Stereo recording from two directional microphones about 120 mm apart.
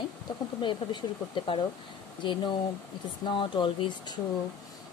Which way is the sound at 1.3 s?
40° left (ahead or behind).